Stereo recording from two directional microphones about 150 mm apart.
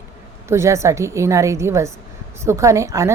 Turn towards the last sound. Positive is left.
turn(degrees=-20)  # may be behind; listen again after turning